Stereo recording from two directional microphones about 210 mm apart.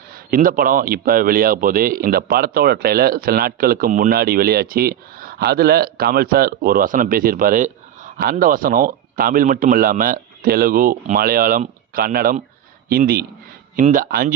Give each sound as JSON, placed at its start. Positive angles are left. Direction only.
{"t": 0.1, "sound": "a man's voice", "side_deg": -40}